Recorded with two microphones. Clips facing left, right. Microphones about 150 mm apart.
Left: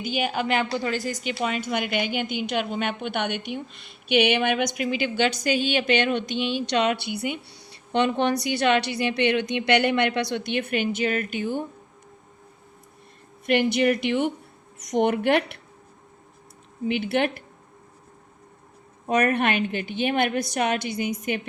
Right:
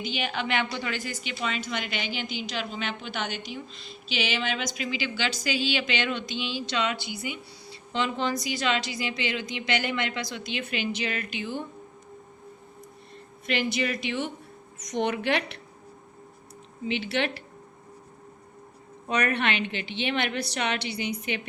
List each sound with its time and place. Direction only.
0.0 s a woman's voice: 45° left (ahead or behind)
13.5 s speech: 60° left (ahead or behind)
16.8 s a woman's voice: 55° left (ahead or behind)
19.0 s a woman's voice: 50° left (ahead or behind)